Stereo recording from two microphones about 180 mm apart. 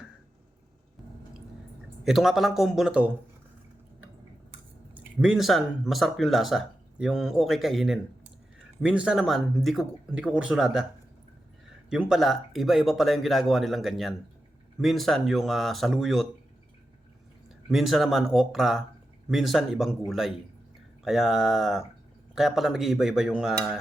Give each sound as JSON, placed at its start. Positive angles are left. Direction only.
{"t": 2.0, "sound": "speech", "side_deg": 0}
{"t": 4.9, "sound": "speech", "side_deg": -5}
{"t": 11.9, "sound": "speech", "side_deg": -5}
{"t": 17.7, "sound": "speech", "side_deg": 0}